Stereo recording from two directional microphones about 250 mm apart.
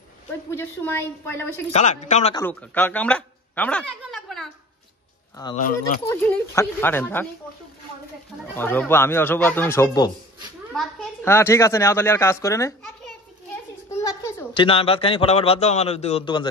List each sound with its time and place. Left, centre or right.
0.6 s a woman's voice: centre
1.7 s speech: left
2.3 s a woman's voice: centre
6.0 s a woman's voice: centre
8.5 s a woman's voice: centre